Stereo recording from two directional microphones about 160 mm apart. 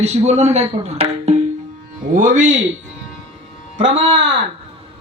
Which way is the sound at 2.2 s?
55° right (ahead or behind).